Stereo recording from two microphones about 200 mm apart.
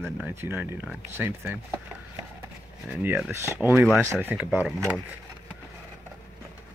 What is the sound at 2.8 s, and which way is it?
Speech, 5° right (ahead or behind).